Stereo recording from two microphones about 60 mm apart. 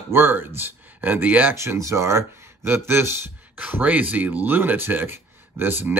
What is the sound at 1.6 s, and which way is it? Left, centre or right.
Speech, right.